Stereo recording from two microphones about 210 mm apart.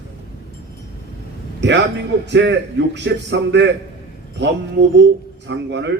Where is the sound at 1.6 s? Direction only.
55° right (ahead or behind).